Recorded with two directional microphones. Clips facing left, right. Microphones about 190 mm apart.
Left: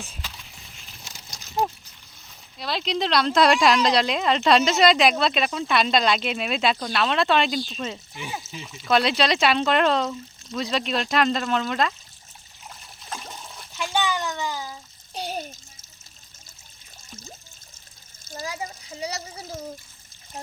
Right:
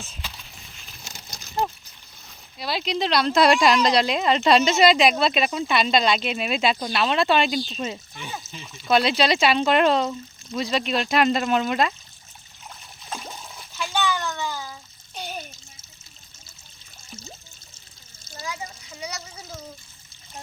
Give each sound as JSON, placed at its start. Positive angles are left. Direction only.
{"t": 2.6, "sound": "speech", "side_deg": -5}
{"t": 8.1, "sound": "speech", "side_deg": 10}
{"t": 13.1, "sound": "trickle", "side_deg": 0}
{"t": 13.7, "sound": "bathtub", "side_deg": 15}
{"t": 15.1, "sound": "water", "side_deg": 35}
{"t": 18.4, "sound": "water", "side_deg": 30}